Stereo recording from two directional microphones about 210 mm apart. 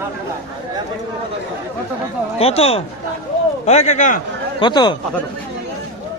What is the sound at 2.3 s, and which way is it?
A man's voice, 30° left (ahead or behind).